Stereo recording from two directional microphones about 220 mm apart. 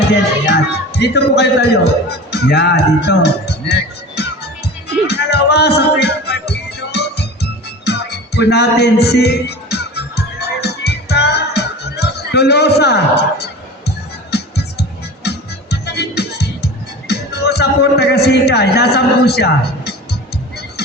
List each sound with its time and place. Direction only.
0.1 s speech: 50° left (ahead or behind)
5.0 s music: 50° left (ahead or behind)
17.1 s speech: 50° left (ahead or behind)